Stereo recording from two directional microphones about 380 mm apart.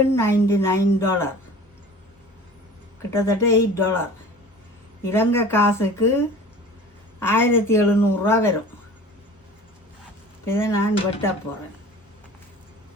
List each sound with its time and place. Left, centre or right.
0.2 s speech: centre
3.1 s speech: centre
5.0 s speech: centre
10.4 s speech: centre